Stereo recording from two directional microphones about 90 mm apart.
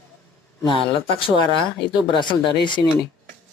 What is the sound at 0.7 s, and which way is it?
Speech, 65° left (ahead or behind).